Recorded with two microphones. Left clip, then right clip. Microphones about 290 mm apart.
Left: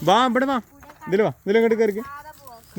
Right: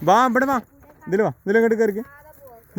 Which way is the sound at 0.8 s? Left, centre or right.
Left.